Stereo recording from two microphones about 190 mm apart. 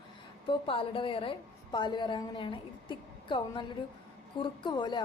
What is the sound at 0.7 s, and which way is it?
A woman's voice, 30° left (ahead or behind).